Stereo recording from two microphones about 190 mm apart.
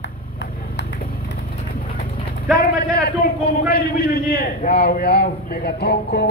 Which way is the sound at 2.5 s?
55° left (ahead or behind).